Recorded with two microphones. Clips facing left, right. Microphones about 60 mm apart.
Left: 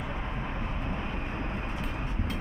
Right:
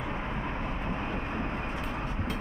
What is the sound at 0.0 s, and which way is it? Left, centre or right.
Vehicle, right.